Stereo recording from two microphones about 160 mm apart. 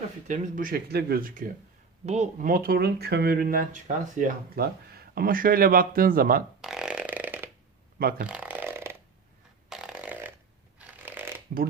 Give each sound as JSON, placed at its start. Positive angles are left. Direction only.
{"t": 0.3, "sound": "speech", "side_deg": -55}
{"t": 2.0, "sound": "speech", "side_deg": -45}
{"t": 6.6, "sound": "burping", "side_deg": -5}
{"t": 7.9, "sound": "speech", "side_deg": -70}
{"t": 8.3, "sound": "a sound", "side_deg": -10}
{"t": 9.6, "sound": "fart", "side_deg": -5}
{"t": 10.8, "sound": "a sound", "side_deg": -10}